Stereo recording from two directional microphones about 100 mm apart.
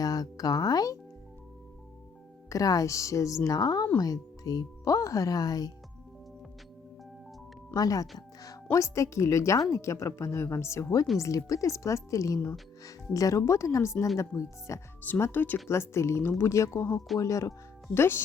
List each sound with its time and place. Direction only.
0.0 s speech: 40° left (ahead or behind)
2.5 s speech: 35° left (ahead or behind)
7.7 s speech: 35° left (ahead or behind)
15.0 s speech: 20° left (ahead or behind)